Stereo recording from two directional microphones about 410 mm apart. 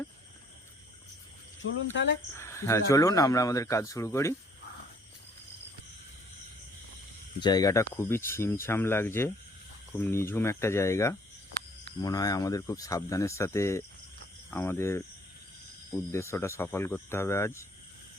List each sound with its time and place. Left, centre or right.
1.6 s speech: left
2.4 s speech: centre
7.3 s speech: centre
16.1 s speech: centre